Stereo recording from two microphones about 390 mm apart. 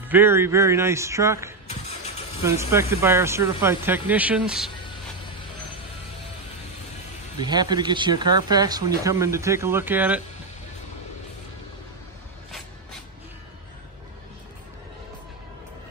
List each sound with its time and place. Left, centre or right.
0.1 s speech: centre
1.7 s vehicle: centre
2.4 s speech: centre
7.3 s speech: centre